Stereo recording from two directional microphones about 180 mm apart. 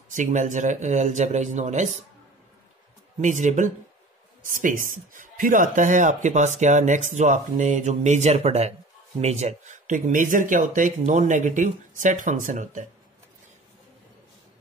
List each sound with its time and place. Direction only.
0.1 s speech: 45° right (ahead or behind)
3.2 s speech: 40° right (ahead or behind)